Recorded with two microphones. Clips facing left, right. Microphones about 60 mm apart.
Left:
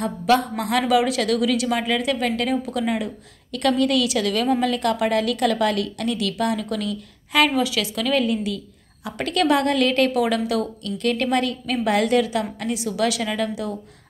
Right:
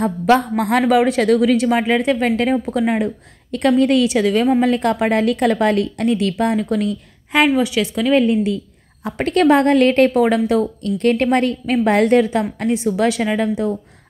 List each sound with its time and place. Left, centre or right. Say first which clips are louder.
0.0 s speech: right 4 dB; right
4.2 s speech: right 6 dB; right
7.4 s a woman's voice: right 5 dB; centre